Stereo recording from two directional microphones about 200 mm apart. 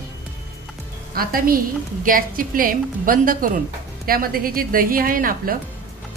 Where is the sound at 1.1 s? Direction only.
45° right (ahead or behind).